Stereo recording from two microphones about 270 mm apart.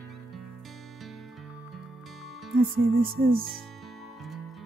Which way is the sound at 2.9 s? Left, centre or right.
Right.